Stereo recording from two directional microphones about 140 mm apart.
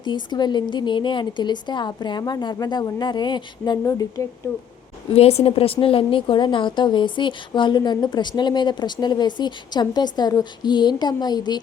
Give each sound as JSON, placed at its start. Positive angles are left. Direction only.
{"t": 0.0, "sound": "a woman's voice", "side_deg": 30}
{"t": 5.1, "sound": "a woman's voice", "side_deg": 45}